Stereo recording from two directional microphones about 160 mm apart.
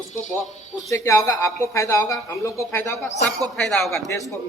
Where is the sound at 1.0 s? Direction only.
20° left (ahead or behind); by 4.0 s 5° left (ahead or behind).